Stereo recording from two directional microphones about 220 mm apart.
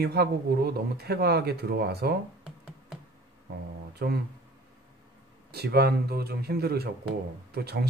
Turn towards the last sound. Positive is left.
turn(degrees=-45)  # may be behind; listen again after turning